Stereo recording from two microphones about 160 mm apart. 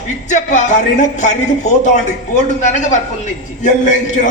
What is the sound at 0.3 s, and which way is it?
A man's voice, 50° left (ahead or behind).